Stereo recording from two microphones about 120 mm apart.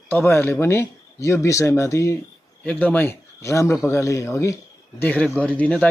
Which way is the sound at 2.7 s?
10° left (ahead or behind).